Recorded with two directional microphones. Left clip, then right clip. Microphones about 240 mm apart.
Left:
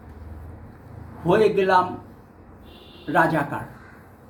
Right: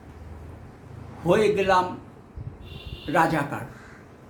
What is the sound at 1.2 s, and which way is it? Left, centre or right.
Speech, centre.